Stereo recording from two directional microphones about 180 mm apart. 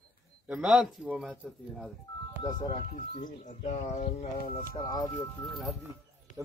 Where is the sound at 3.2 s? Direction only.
40° left (ahead or behind).